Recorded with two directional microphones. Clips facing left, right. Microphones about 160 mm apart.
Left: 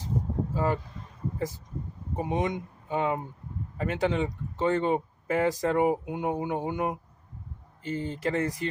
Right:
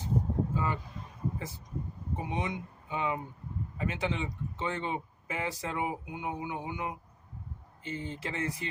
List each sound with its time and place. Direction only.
0.5 s speech: 45° left (ahead or behind)
2.1 s speech: 45° left (ahead or behind)